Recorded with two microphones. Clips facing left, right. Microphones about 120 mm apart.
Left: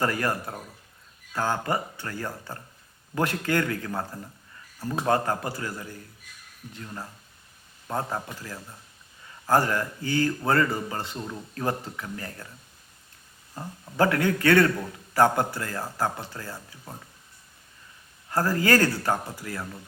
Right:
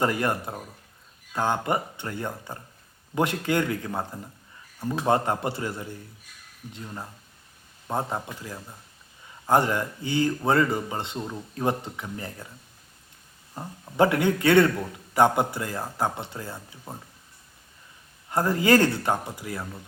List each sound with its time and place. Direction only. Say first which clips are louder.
0.0 s a man's voice: right 2 dB; 20° right (ahead or behind)
13.5 s a man's voice: even; 20° right (ahead or behind)
18.3 s a man's voice: right 2 dB; 20° right (ahead or behind)